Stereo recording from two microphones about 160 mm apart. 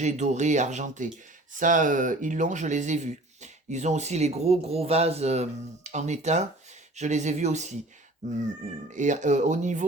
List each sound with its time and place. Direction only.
0.0 s speech: 45° right (ahead or behind)